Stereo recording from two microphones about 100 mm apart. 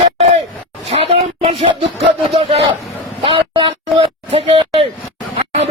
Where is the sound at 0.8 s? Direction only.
75° right (ahead or behind).